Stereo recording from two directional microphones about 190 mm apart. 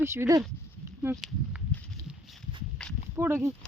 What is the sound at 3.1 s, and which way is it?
Speech, 15° right (ahead or behind).